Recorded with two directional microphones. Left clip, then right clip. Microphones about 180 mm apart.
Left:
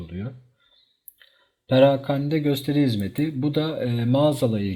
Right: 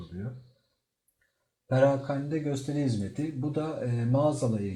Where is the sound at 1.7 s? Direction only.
30° left (ahead or behind).